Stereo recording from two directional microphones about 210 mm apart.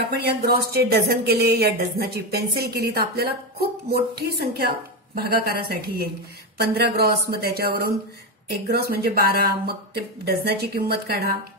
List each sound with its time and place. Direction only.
0.0 s speech: 50° right (ahead or behind)